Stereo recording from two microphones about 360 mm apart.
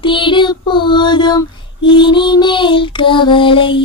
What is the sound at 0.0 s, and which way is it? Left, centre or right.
Child singing, centre.